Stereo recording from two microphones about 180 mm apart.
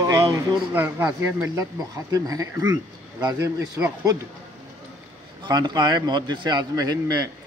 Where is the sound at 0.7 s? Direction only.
10° right (ahead or behind).